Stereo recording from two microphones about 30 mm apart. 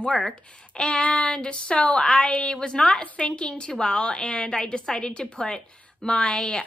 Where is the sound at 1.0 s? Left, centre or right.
Left.